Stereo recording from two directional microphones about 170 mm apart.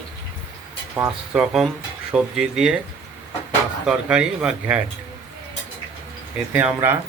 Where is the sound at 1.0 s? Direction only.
10° right (ahead or behind).